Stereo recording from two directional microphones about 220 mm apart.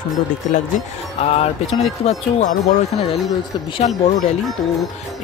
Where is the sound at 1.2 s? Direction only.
25° left (ahead or behind).